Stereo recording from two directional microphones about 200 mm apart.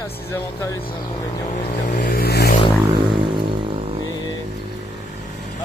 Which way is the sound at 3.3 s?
25° right (ahead or behind).